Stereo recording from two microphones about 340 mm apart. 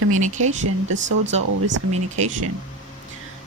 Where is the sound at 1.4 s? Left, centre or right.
Right.